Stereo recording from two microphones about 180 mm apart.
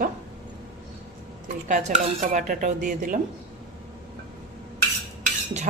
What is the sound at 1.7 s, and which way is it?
A man's voice, 40° right (ahead or behind).